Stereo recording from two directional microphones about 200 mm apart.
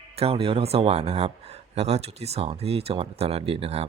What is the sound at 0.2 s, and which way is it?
Speech, 30° right (ahead or behind).